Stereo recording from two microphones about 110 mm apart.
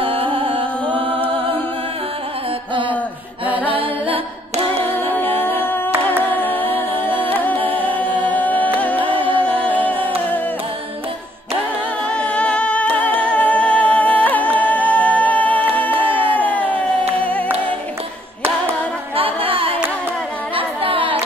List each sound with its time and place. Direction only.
0.0 s music: 55° right (ahead or behind)
1.0 s music: 10° left (ahead or behind)
2.7 s a sound: 50° right (ahead or behind)
3.6 s music: 55° right (ahead or behind)
5.1 s music: 20° left (ahead or behind)
12.1 s music: 10° left (ahead or behind)
16.3 s a sound: 15° left (ahead or behind)
17.2 s a capella: 15° left (ahead or behind)
19.1 s music: 60° right (ahead or behind)
20.5 s carnatic music: 55° right (ahead or behind)